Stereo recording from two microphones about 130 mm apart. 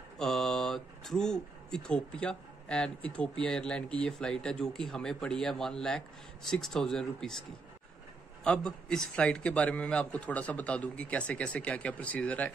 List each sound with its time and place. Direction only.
0.2 s speech: 5° left (ahead or behind)
8.5 s a man's voice: 5° left (ahead or behind)